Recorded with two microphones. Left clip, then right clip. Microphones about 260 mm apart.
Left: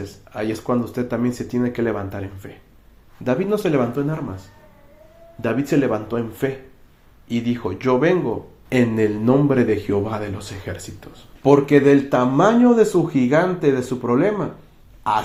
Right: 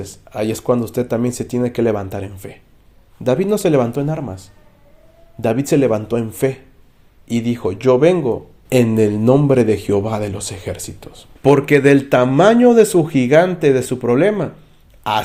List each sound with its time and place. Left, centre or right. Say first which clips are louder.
0.0 s speech: right 4 dB; right